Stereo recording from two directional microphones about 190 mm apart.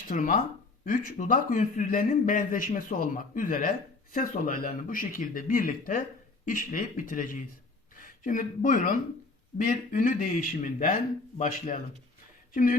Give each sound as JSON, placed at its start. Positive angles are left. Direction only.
{"t": 0.1, "sound": "a man's voice", "side_deg": 45}